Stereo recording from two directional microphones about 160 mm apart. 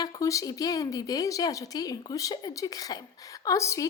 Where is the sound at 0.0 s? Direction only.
20° left (ahead or behind).